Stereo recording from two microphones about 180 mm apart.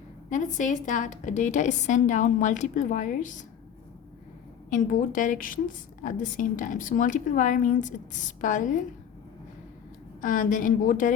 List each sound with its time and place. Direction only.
0.3 s a woman's voice: 45° left (ahead or behind)
4.7 s a woman's voice: 45° left (ahead or behind)
10.2 s a woman's voice: 50° left (ahead or behind)